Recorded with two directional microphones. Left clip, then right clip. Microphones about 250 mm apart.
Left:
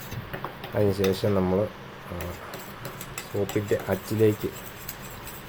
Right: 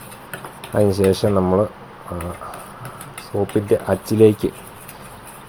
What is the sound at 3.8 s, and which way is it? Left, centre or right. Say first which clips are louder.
Speech: right 10 dB; right.